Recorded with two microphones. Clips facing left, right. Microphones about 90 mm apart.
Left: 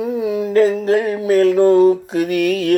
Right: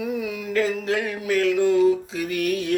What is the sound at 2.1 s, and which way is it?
Music, 70° left (ahead or behind).